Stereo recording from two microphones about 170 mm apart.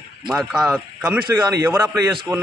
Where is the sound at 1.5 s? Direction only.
15° right (ahead or behind).